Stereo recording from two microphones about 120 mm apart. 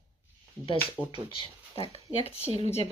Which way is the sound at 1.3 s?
50° left (ahead or behind).